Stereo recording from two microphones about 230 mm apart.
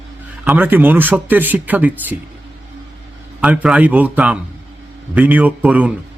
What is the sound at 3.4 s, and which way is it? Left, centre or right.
A man's voice, centre.